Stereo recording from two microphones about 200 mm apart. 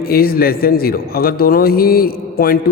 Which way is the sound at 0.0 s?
50° left (ahead or behind).